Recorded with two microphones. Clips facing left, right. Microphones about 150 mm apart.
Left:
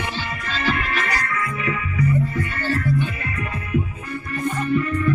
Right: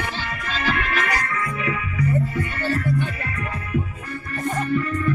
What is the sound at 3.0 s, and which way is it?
Music, 40° right (ahead or behind).